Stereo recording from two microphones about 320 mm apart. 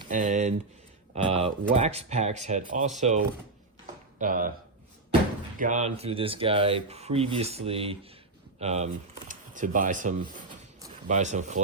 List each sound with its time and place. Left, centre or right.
0.0 s speech: right
4.2 s speech: right
5.5 s speech: right